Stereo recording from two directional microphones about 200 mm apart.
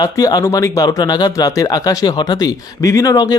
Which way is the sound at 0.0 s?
20° left (ahead or behind).